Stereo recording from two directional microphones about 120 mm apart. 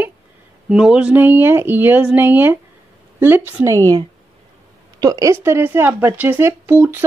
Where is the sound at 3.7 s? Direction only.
30° right (ahead or behind).